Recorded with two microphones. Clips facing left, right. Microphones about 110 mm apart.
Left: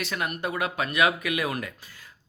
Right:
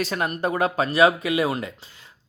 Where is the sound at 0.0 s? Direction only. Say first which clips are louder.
Right 5 dB; 35° right (ahead or behind).